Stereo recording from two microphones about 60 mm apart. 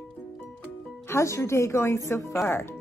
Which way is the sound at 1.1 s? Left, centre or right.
Left.